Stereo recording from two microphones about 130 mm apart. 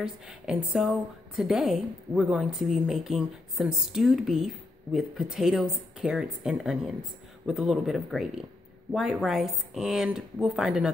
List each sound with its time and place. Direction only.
0.0 s a woman's voice: 5° right (ahead or behind)